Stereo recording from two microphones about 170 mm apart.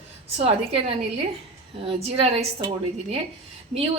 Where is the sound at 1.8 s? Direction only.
35° right (ahead or behind).